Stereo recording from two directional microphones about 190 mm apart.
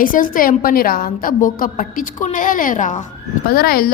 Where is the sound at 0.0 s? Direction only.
45° left (ahead or behind).